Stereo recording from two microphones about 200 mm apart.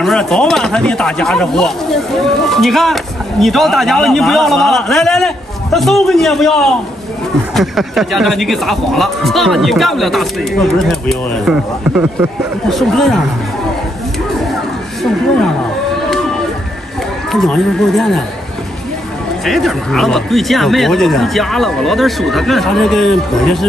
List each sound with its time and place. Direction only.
0.0 s speech: centre (ahead or behind)
17.3 s speech: centre (ahead or behind)
19.4 s speech: centre (ahead or behind)